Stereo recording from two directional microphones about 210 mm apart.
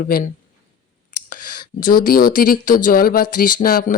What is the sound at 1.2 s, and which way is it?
Speech, 40° left (ahead or behind).